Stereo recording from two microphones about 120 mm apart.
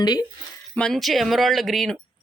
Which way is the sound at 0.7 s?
5° left (ahead or behind).